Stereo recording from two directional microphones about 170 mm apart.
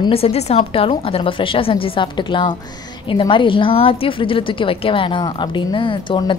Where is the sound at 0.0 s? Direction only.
35° left (ahead or behind).